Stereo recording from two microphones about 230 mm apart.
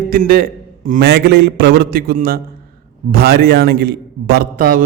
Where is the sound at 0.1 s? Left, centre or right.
Right.